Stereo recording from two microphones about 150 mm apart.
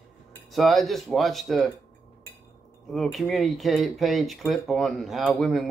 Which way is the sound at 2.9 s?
Centre (ahead or behind).